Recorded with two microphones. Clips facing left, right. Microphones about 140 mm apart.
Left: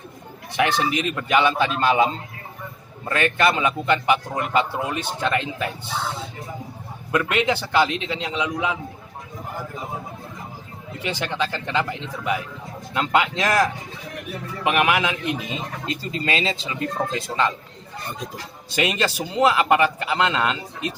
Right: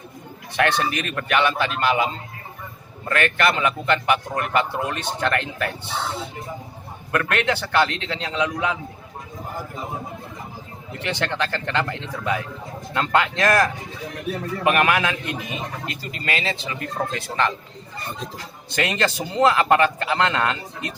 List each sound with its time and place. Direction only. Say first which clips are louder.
0.5 s a man's voice: even; 10° left (ahead or behind)
7.1 s a man's voice: left 1 dB; 15° left (ahead or behind)
11.0 s a man's voice: even; 10° left (ahead or behind)
18.8 s a man's voice: even; 10° left (ahead or behind)